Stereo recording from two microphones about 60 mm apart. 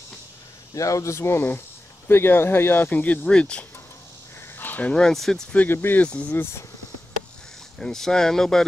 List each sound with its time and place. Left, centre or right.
0.7 s speech: left; by 3.6 s centre
4.6 s a sound: left
4.9 s speech: centre
5.7 s speech: left
6.0 s speech: left
6.3 s speech: left
7.8 s speech: centre